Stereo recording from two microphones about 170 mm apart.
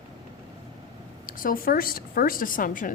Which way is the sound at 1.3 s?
55° left (ahead or behind).